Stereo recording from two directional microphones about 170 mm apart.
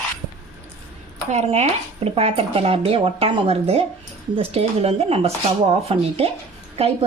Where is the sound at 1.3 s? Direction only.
40° right (ahead or behind).